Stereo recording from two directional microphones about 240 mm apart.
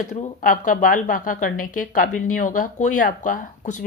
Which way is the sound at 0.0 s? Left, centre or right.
Left.